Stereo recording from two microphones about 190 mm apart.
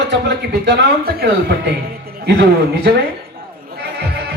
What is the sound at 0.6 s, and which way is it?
A man's voice, 60° right (ahead or behind).